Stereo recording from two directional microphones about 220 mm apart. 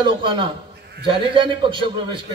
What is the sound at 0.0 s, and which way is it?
A man's voice, 20° right (ahead or behind).